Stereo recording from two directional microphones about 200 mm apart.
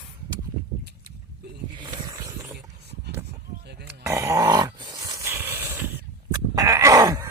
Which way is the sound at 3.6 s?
55° right (ahead or behind).